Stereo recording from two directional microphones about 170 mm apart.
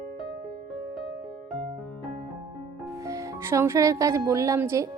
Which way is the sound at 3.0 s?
20° right (ahead or behind).